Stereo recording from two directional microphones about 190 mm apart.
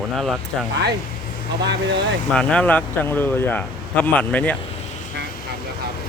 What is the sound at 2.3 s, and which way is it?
A man's voice, 5° left (ahead or behind).